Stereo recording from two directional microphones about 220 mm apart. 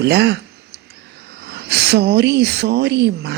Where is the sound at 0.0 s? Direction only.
50° right (ahead or behind).